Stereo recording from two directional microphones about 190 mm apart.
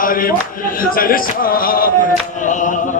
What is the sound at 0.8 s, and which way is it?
Speech, 50° left (ahead or behind).